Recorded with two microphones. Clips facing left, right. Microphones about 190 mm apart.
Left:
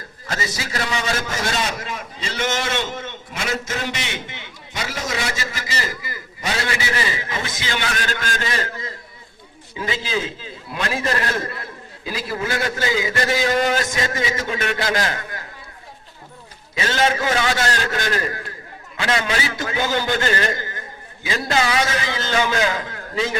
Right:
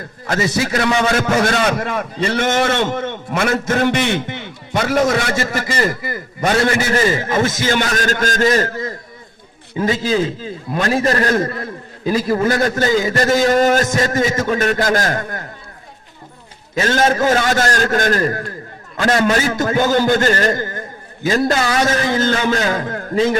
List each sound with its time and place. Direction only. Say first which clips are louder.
0.3 s a man's voice: right 10 dB; 55° right (ahead or behind)
16.7 s a man's voice: right 5 dB; 45° right (ahead or behind)